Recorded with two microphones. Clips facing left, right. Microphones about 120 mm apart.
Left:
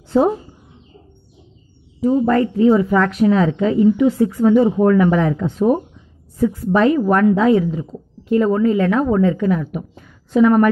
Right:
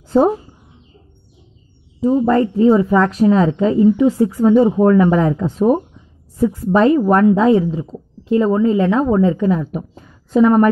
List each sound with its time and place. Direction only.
0.1 s a woman's voice: 35° right (ahead or behind)
2.0 s a woman's voice: 25° right (ahead or behind)